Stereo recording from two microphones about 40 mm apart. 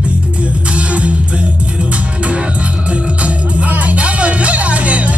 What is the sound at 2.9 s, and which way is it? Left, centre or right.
Music, right.